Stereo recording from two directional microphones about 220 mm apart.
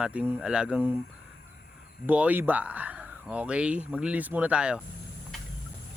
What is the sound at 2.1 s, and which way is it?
Speech, 5° right (ahead or behind).